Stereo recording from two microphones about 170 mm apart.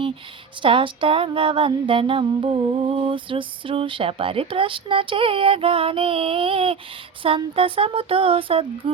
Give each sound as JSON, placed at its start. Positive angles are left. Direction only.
{"t": 0.6, "sound": "music", "side_deg": -30}